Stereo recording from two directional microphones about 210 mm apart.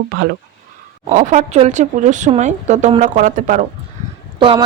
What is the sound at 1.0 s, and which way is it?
Speech, 35° right (ahead or behind).